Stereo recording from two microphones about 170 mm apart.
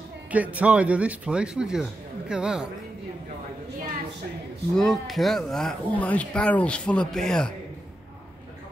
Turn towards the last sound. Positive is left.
turn(degrees=0)  # may be behind; listen again after turning